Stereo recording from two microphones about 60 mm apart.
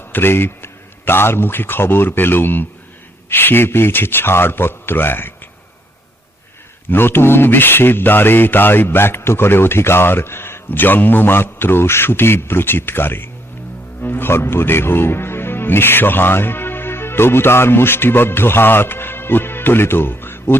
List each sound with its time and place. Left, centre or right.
0.1 s a man's voice: left
6.9 s speech: left